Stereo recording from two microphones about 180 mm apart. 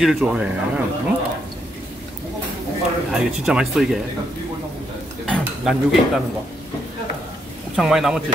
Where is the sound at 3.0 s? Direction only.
5° right (ahead or behind).